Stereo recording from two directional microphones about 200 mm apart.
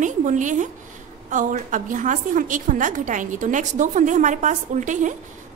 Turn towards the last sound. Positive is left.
turn(degrees=-40)  # may be behind; listen again after turning